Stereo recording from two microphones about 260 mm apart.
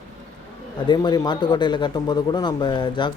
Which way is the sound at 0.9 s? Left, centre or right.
Centre.